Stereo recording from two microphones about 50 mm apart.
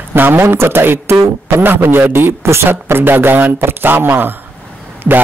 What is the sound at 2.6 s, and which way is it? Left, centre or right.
Speech, right.